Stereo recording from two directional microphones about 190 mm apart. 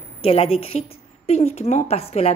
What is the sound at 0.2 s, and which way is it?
A woman's voice, 30° left (ahead or behind).